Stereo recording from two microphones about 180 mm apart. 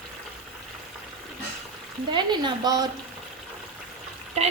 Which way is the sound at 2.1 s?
25° right (ahead or behind).